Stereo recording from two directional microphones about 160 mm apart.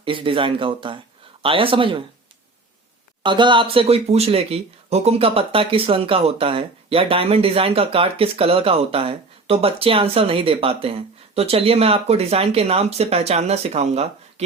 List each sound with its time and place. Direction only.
0.0 s speech: 35° right (ahead or behind)
3.2 s speech: 30° right (ahead or behind)